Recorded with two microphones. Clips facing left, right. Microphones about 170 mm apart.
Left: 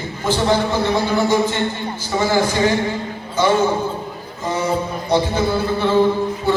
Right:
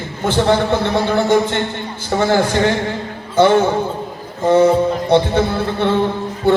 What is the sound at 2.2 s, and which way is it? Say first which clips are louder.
Speech: right 2 dB; 55° right (ahead or behind).